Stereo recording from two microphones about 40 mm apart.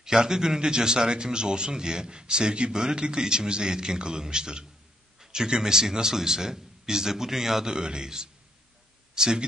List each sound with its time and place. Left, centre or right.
0.0 s a man's voice: centre